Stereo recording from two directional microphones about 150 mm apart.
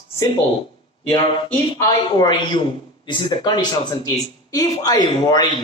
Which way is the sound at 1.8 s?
25° left (ahead or behind).